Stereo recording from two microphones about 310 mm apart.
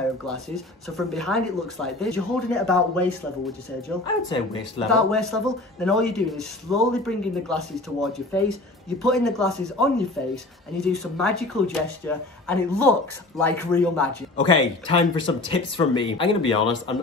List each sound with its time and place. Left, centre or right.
0.8 s speech: centre
4.0 s speech: centre
4.8 s speech: centre
14.6 s speech: centre